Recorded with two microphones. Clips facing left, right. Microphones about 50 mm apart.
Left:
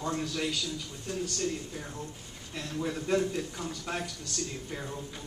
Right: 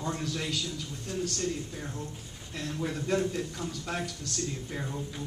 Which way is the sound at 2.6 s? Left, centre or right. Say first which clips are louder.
Even; centre.